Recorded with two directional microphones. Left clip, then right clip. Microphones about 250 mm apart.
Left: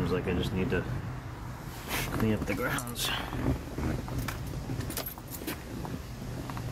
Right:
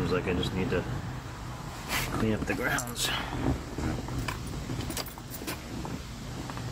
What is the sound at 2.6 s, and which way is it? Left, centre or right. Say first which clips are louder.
Speech: right 2 dB; centre.